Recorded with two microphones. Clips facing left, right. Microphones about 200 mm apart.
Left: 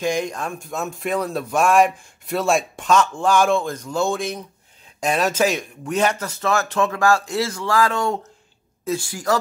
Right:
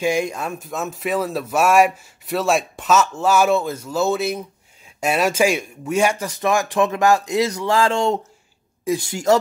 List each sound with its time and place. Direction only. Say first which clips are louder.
0.0 s speech: right 2 dB; 10° right (ahead or behind)